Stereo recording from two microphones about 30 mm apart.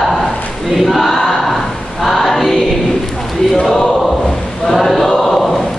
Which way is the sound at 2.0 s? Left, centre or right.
Centre.